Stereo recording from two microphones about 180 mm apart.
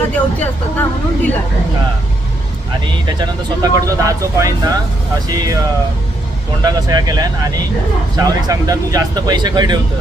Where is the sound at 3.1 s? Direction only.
20° right (ahead or behind).